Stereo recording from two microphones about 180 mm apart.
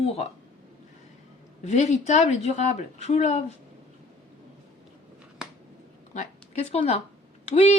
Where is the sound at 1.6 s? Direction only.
40° left (ahead or behind).